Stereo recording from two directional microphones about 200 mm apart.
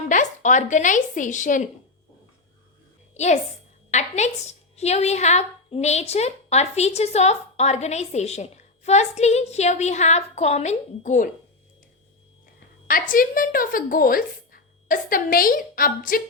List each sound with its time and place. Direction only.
0.0 s speech: 40° left (ahead or behind)
3.9 s a woman's voice: 35° left (ahead or behind)
12.9 s a woman's voice: 45° left (ahead or behind)